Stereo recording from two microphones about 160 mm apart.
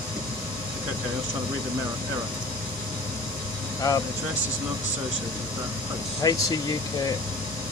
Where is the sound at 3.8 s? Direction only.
25° left (ahead or behind).